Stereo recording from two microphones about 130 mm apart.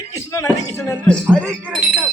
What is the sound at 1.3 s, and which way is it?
Speech, 5° left (ahead or behind).